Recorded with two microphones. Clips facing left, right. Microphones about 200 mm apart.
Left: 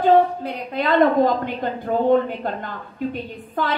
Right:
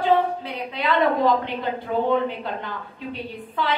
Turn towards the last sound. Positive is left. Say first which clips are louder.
# left 2 dB
turn(degrees=45)  # may be behind; listen again after turning